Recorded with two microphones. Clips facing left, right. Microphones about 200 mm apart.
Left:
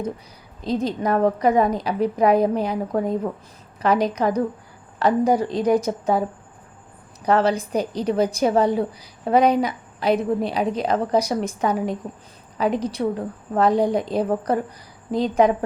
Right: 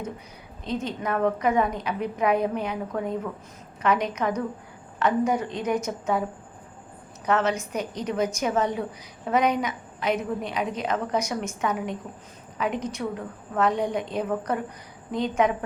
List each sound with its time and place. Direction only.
0.6 s a woman's voice: 35° left (ahead or behind)
7.3 s a woman's voice: 35° left (ahead or behind)